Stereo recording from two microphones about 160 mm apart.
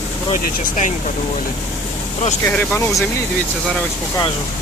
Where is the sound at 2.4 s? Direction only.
10° left (ahead or behind).